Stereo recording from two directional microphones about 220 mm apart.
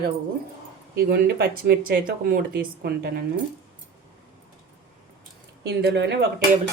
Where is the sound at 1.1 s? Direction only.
45° right (ahead or behind).